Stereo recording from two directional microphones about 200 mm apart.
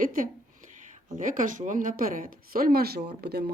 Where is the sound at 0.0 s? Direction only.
45° right (ahead or behind).